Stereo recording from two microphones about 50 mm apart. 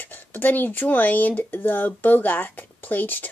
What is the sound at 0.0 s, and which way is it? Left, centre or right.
A woman's voice, left.